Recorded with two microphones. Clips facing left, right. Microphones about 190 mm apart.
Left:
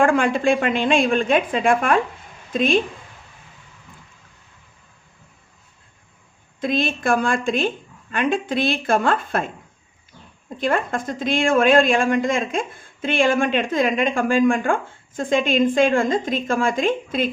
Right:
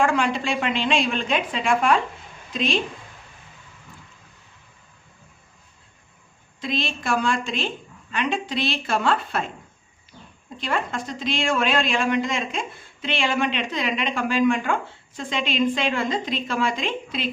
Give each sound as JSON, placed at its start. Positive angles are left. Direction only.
{"t": 0.0, "sound": "a woman's voice", "side_deg": 50}
{"t": 6.6, "sound": "a woman's voice", "side_deg": 50}
{"t": 10.6, "sound": "a woman's voice", "side_deg": 50}